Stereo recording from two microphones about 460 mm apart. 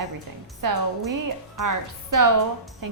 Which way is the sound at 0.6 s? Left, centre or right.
Right.